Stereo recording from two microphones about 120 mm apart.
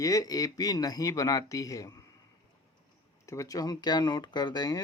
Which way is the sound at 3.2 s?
25° left (ahead or behind).